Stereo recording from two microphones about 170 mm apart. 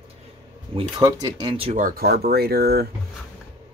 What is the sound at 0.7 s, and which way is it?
Speech, 30° right (ahead or behind).